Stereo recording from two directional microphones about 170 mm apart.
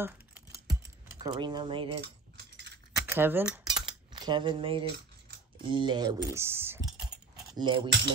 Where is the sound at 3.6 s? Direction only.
25° right (ahead or behind).